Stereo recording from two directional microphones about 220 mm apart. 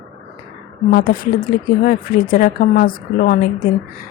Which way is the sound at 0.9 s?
40° left (ahead or behind).